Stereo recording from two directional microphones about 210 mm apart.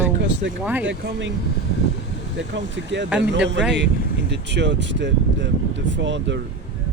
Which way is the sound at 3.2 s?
55° right (ahead or behind).